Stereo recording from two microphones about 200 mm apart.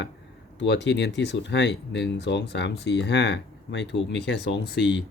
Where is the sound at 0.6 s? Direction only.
60° left (ahead or behind).